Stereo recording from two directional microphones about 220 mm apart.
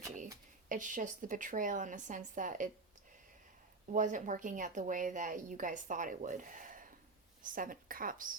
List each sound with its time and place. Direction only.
0.7 s a woman's voice: 35° right (ahead or behind)
3.9 s a woman's voice: 35° right (ahead or behind)